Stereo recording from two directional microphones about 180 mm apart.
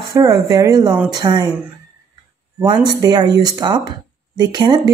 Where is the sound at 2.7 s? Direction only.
20° right (ahead or behind).